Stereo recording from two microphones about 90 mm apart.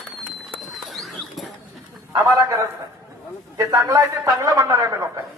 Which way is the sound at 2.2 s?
40° right (ahead or behind).